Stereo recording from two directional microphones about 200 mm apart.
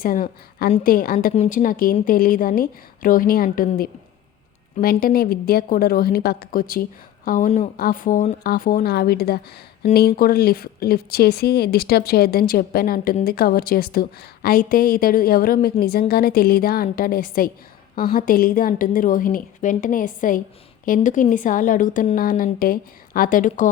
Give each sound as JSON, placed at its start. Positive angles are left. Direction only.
{"t": 0.0, "sound": "a woman's voice", "side_deg": 45}